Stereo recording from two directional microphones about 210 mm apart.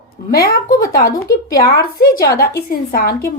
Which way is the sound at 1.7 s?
45° left (ahead or behind).